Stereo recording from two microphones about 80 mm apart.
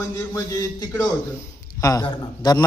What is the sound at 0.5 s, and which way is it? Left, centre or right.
A man's voice, left.